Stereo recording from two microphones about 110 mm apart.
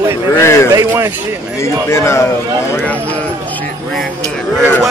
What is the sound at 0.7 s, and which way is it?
Speech, 30° right (ahead or behind).